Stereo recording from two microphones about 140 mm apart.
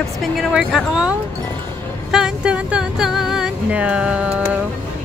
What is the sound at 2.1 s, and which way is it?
Speech, 5° right (ahead or behind).